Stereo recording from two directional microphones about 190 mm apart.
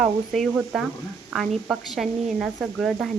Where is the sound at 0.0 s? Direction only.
Centre (ahead or behind).